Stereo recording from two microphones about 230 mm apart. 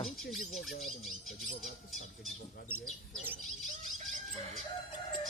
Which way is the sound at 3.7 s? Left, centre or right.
Right.